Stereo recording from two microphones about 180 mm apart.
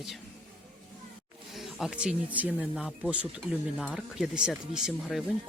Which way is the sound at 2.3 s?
10° right (ahead or behind).